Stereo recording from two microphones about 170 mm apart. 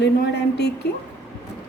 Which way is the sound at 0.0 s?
80° left.